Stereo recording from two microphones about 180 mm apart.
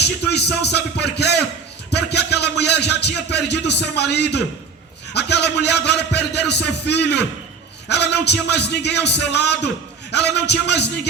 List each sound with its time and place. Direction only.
0.0 s a man's voice: 70° left (ahead or behind)